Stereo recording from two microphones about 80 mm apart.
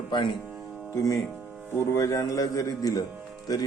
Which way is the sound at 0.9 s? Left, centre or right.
Left.